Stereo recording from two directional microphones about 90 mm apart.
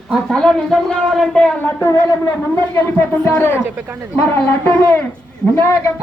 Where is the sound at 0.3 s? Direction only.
5° left (ahead or behind).